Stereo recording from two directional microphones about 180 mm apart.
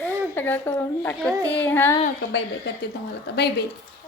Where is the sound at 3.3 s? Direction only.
70° left (ahead or behind).